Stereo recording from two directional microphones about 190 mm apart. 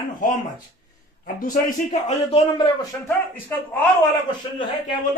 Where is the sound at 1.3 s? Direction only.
45° left (ahead or behind); by 2.7 s 25° left (ahead or behind).